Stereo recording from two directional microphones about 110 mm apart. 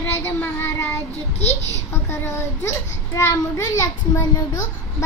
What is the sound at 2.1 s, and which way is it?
A child's voice, 25° left (ahead or behind).